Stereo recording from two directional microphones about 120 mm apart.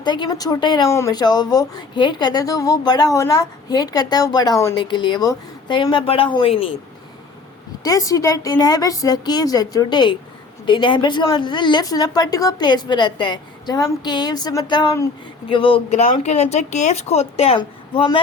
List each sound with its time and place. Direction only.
0.0 s a woman's voice: 40° left (ahead or behind)
0.9 s a woman's voice: 25° left (ahead or behind); by 6.7 s 50° left (ahead or behind)
7.9 s a woman's voice: 30° left (ahead or behind); by 15.8 s 45° left (ahead or behind)
16.2 s a woman's voice: 65° left (ahead or behind)
17.6 s speech: 40° left (ahead or behind)